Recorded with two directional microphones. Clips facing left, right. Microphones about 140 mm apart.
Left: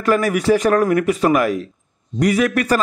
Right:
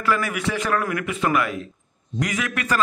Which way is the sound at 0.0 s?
40° left (ahead or behind).